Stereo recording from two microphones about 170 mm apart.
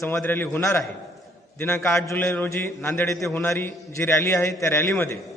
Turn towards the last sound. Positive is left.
turn(degrees=15)  # may be behind; listen again after turning